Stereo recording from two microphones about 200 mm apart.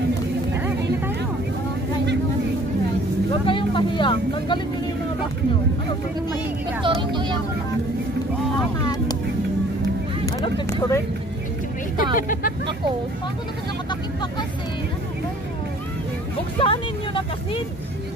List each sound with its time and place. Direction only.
3.3 s vehicle: 25° left (ahead or behind)
6.8 s speech: 25° right (ahead or behind)
8.8 s vehicle: 20° left (ahead or behind)
10.2 s vehicle: 15° left (ahead or behind)
12.0 s speech: 45° left (ahead or behind)
16.5 s speech: 25° left (ahead or behind)